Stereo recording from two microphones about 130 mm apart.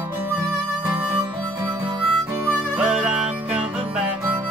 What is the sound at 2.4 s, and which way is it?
Music, 10° right (ahead or behind).